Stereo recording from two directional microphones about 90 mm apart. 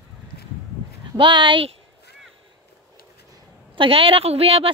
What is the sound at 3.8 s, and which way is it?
Speech, 90° right.